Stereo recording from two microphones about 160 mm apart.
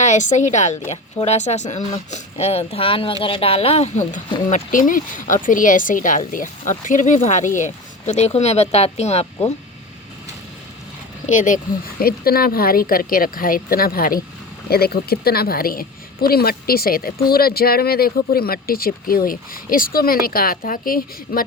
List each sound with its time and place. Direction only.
0.0 s a woman's voice: 50° left (ahead or behind)
11.3 s speech: 50° left (ahead or behind)
14.7 s a woman's voice: 75° left (ahead or behind)